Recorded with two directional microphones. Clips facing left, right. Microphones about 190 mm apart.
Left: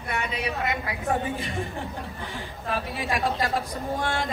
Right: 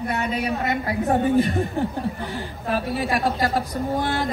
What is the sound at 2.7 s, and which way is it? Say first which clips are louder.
Speech: right 5 dB; 40° right (ahead or behind).